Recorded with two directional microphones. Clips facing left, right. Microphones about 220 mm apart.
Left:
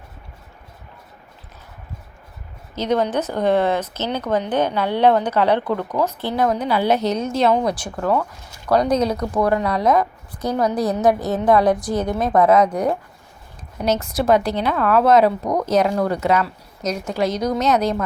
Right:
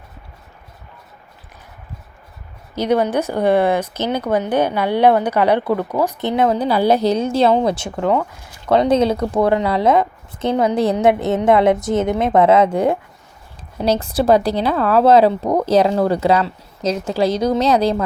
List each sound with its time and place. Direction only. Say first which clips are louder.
2.7 s speech: right 3 dB; 10° right (ahead or behind)
6.2 s speech: right 5 dB; 25° right (ahead or behind)